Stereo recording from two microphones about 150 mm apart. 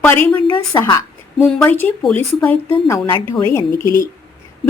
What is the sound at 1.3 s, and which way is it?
Speech, centre (ahead or behind).